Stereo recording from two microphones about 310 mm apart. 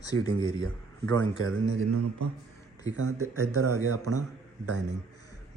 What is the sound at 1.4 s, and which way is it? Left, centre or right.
Speech, right.